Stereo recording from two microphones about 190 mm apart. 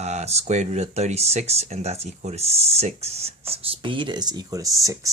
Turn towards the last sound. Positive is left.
turn(degrees=-15)  # may be behind; listen again after turning